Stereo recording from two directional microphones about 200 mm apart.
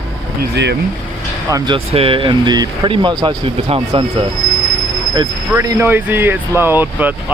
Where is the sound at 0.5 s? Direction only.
60° right (ahead or behind).